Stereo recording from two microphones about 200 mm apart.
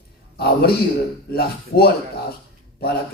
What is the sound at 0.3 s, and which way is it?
A man's voice, 50° left (ahead or behind).